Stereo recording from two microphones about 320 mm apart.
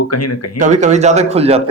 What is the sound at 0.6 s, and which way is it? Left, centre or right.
A man's voice, right.